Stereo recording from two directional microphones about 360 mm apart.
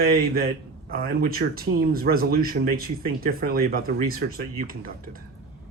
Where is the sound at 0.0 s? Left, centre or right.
Right.